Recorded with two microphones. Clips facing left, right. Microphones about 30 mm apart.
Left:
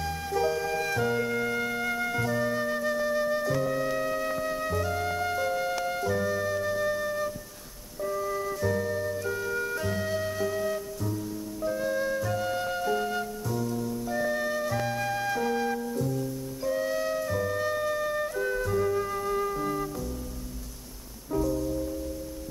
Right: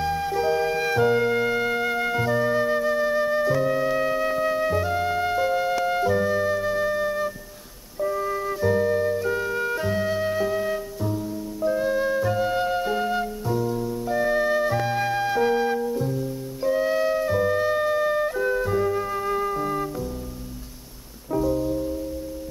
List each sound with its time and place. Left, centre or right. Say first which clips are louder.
0.0 s music: right 5 dB; centre
0.6 s music: right 6 dB; right
5.9 s flute: right 6 dB; right
21.3 s music: right 5 dB; right